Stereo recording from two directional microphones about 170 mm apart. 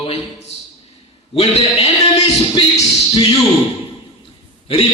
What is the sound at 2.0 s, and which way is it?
Speech, 20° left (ahead or behind).